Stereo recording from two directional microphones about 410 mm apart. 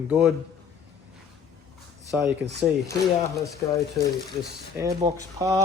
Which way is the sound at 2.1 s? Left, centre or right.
Centre.